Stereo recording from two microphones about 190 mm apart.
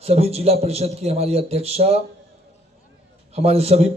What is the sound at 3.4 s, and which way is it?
Speech, 30° right (ahead or behind).